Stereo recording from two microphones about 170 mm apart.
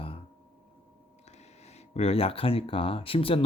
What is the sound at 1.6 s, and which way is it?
Speech, 40° left (ahead or behind).